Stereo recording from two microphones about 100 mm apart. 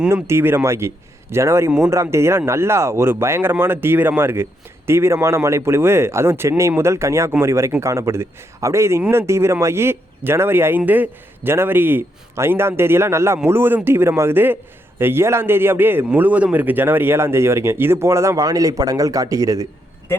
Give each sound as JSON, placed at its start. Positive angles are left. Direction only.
{"t": 0.1, "sound": "speech", "side_deg": -25}